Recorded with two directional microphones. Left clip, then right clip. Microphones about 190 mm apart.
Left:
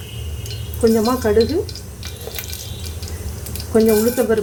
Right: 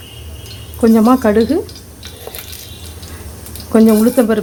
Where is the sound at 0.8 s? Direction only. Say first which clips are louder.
Right 5 dB; 60° right (ahead or behind).